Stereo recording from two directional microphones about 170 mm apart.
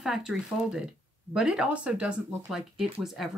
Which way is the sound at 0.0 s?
5° right (ahead or behind).